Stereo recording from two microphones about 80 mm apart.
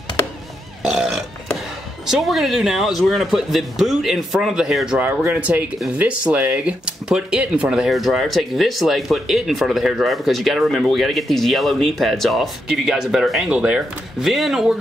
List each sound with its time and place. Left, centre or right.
0.8 s burping: centre
2.0 s speech: centre
5.2 s speech: centre
13.5 s speech: centre
14.2 s speech: centre